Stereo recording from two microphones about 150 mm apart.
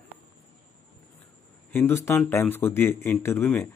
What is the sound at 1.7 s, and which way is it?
Speech, 15° left (ahead or behind).